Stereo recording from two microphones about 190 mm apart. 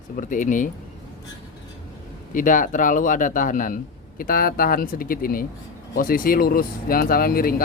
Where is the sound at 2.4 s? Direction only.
45° left (ahead or behind).